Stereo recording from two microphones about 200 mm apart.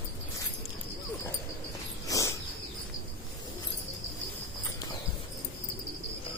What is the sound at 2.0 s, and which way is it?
Bird, 15° left (ahead or behind).